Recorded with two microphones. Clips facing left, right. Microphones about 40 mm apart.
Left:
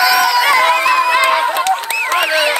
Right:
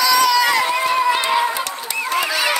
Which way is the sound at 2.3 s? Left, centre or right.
Left.